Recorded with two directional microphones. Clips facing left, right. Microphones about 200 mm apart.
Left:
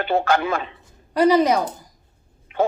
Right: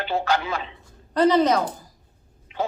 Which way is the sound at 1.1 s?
10° left (ahead or behind).